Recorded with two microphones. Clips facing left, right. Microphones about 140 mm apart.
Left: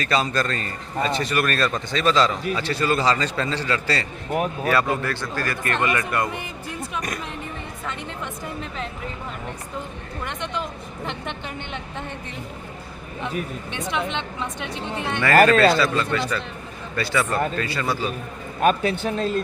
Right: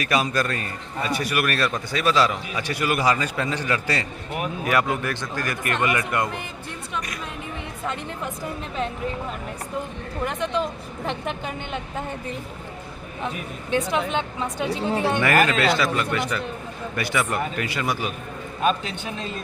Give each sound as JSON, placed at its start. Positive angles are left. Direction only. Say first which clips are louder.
{"t": 0.0, "sound": "a man's voice", "louder": "even", "side_deg": -10}
{"t": 11.0, "sound": "a woman's voice", "louder": "right 3 dB", "side_deg": 0}
{"t": 14.2, "sound": "speech", "louder": "right 3 dB", "side_deg": -40}
{"t": 15.2, "sound": "a man's voice", "louder": "left 8 dB", "side_deg": -15}
{"t": 18.6, "sound": "a man's voice", "louder": "left 4 dB", "side_deg": 45}